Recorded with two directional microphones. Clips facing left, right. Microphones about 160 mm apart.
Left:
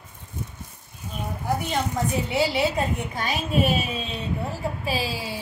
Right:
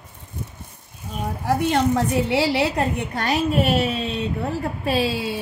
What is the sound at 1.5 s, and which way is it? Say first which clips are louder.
A woman's voice: right 7 dB; 70° right (ahead or behind).